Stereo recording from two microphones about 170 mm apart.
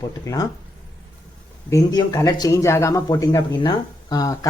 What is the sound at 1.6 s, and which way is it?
Speech, 20° left (ahead or behind).